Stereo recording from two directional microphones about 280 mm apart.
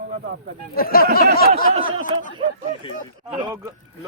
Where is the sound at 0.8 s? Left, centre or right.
Left.